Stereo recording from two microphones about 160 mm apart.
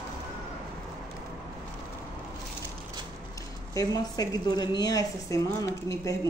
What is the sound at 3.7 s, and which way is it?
A woman's voice, 20° left (ahead or behind).